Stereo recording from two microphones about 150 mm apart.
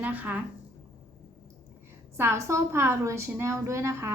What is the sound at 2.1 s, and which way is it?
A woman's voice, 15° right (ahead or behind).